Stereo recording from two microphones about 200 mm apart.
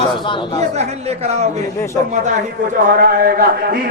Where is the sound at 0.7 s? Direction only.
30° right (ahead or behind).